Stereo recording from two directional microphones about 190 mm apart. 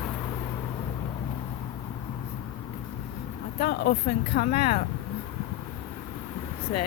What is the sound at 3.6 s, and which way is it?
Speech, 60° left (ahead or behind).